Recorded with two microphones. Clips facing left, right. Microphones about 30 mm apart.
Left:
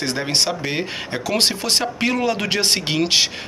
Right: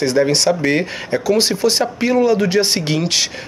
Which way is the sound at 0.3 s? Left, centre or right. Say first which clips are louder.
Right 5 dB; left.